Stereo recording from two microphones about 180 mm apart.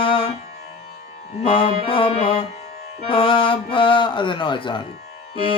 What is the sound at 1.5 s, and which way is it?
Speech, 30° left (ahead or behind).